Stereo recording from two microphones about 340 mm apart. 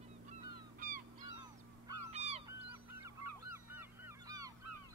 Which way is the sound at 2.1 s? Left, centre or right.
Centre.